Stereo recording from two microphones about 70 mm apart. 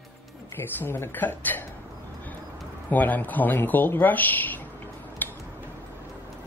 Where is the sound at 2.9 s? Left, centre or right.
Left.